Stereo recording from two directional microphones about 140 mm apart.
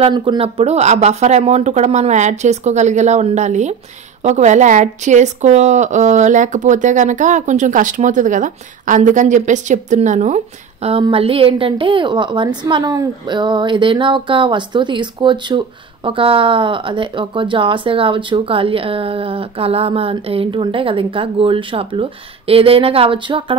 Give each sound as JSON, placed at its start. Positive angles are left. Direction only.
{"t": 0.0, "sound": "speech", "side_deg": -35}